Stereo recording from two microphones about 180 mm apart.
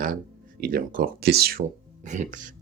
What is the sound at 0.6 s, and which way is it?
Speech, 50° right (ahead or behind).